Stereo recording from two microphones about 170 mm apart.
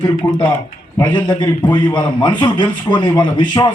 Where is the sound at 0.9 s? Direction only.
25° left (ahead or behind).